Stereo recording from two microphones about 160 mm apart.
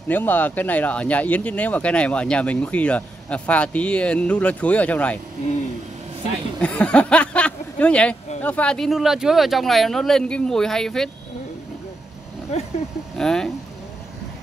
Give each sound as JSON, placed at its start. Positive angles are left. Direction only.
{"t": 0.1, "sound": "speech", "side_deg": 10}
{"t": 6.6, "sound": "speech", "side_deg": 5}
{"t": 12.5, "sound": "speech", "side_deg": 45}
{"t": 13.2, "sound": "speech", "side_deg": 5}